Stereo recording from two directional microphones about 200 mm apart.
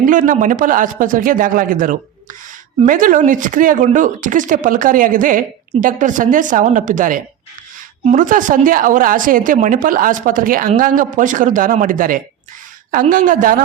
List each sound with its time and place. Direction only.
0.0 s speech: 40° right (ahead or behind)